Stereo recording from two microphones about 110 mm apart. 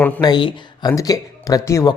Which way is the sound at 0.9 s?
30° left (ahead or behind).